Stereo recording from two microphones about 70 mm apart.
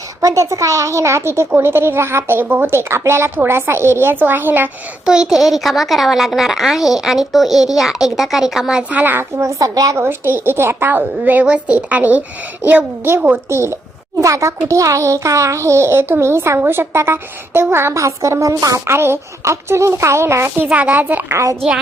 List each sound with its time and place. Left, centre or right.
0.2 s speech: right
5.0 s a woman's voice: centre
8.9 s a woman's voice: right
9.3 s a child's voice: right
10.0 s a woman's voice: right
13.5 s a child's voice: right
18.9 s speech: right
20.7 s a woman's voice: right